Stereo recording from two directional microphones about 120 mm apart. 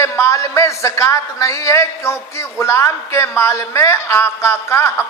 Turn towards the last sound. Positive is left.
turn(degrees=20)  # may be behind; listen again after turning